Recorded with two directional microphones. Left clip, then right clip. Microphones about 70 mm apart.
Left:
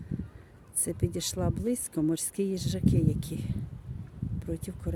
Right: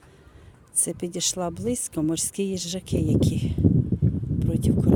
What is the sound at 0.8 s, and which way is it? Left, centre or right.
Speech, right.